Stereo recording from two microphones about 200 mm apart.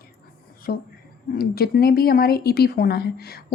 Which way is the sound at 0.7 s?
45° left (ahead or behind).